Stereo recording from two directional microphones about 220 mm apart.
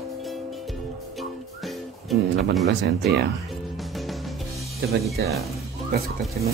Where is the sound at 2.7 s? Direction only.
50° right (ahead or behind).